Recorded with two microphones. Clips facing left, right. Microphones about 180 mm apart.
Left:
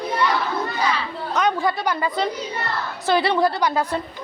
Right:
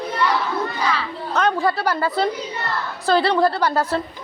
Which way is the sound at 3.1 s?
20° left (ahead or behind).